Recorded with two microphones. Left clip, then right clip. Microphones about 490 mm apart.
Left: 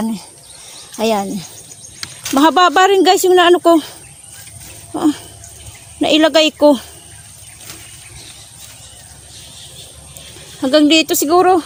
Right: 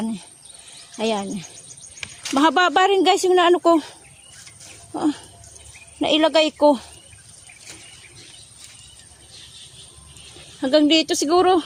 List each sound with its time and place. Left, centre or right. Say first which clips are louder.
0.9 s speech: left 7 dB; right
4.9 s speech: left 7 dB; right
10.6 s speech: left 5 dB; right